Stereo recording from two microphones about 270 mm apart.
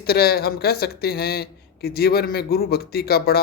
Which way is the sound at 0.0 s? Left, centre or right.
Left.